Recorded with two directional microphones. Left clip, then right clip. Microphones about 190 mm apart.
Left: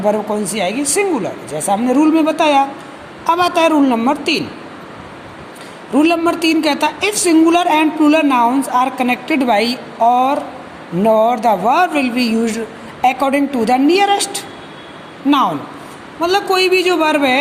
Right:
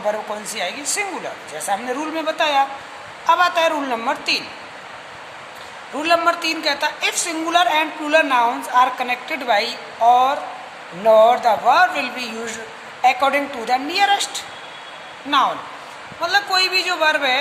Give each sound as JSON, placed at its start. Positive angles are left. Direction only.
{"t": 0.1, "sound": "a woman's voice", "side_deg": 20}
{"t": 5.9, "sound": "a woman's voice", "side_deg": 25}